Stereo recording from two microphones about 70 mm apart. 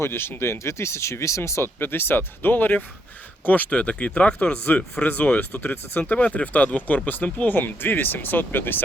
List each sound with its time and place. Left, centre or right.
0.0 s speech: left